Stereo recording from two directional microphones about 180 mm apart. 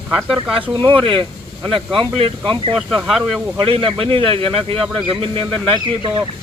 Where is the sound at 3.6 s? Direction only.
30° right (ahead or behind).